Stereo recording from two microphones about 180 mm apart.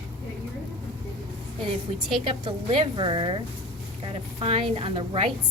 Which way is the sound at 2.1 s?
30° right (ahead or behind).